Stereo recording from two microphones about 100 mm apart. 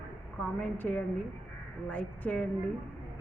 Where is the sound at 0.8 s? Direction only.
15° left (ahead or behind).